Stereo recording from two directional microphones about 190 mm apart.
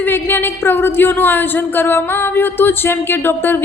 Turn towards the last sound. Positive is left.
turn(degrees=10)  # may be behind; listen again after turning